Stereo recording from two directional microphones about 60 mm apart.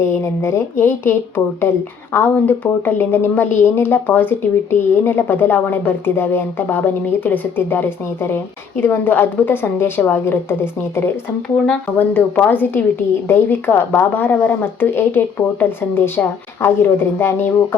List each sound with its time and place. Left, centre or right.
0.0 s speech: left
2.1 s a woman's voice: left
11.9 s a woman's voice: left